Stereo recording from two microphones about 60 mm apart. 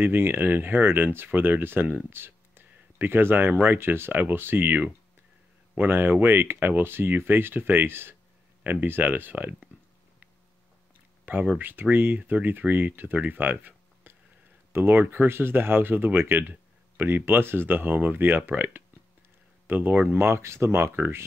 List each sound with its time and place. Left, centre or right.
0.0 s speech: right
11.3 s speech: right
20.2 s speech: right